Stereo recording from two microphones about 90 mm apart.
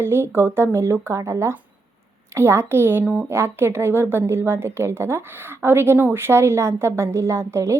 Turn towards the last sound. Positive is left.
turn(degrees=-30)  # may be behind; listen again after turning